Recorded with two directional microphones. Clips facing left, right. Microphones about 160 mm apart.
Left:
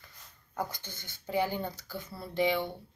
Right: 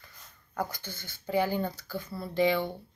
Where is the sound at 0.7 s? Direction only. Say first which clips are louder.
Right 3 dB; 20° left (ahead or behind).